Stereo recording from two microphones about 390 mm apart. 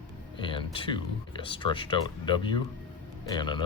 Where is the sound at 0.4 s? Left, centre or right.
Centre.